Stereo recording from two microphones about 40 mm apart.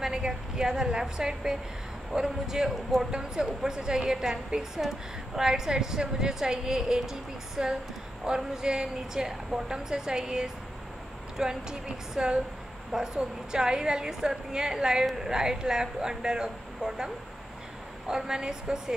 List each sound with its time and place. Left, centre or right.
0.0 s a woman's voice: centre